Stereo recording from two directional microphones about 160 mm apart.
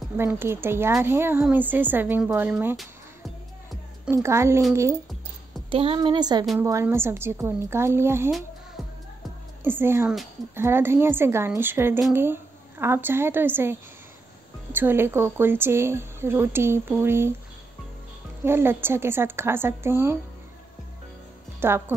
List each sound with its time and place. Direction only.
0.2 s a woman's voice: 15° right (ahead or behind)
4.1 s a woman's voice: 15° right (ahead or behind)
5.7 s a woman's voice: 35° right (ahead or behind); by 8.3 s 15° right (ahead or behind)
8.3 s music: centre (ahead or behind)
9.6 s a woman's voice: 15° right (ahead or behind)
18.4 s a woman's voice: 15° right (ahead or behind)
21.5 s a woman's voice: 15° right (ahead or behind)